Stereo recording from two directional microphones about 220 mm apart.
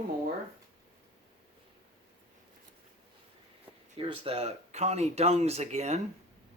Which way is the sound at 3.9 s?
25° right (ahead or behind).